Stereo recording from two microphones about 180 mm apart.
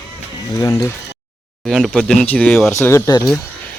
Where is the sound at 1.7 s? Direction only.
Centre (ahead or behind); by 3.2 s 20° left (ahead or behind).